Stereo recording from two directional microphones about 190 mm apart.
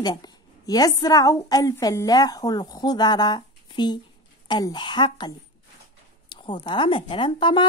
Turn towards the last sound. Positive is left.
turn(degrees=25)  # may be behind; listen again after turning